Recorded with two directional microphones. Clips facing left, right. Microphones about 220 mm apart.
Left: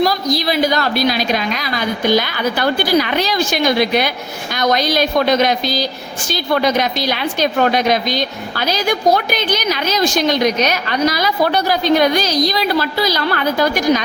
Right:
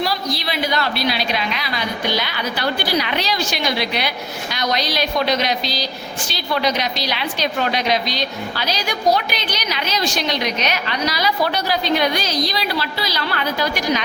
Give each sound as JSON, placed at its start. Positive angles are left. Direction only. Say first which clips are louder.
{"t": 0.0, "sound": "a woman's voice", "louder": "left 7 dB", "side_deg": 45}